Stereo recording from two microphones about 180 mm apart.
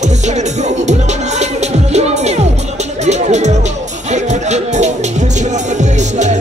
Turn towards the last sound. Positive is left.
turn(degrees=-40)  # may be behind; listen again after turning